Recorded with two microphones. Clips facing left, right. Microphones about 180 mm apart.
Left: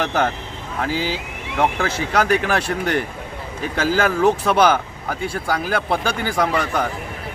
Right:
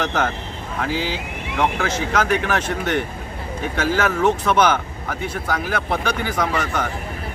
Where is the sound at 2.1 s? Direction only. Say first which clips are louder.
Left 3 dB; 35° left (ahead or behind).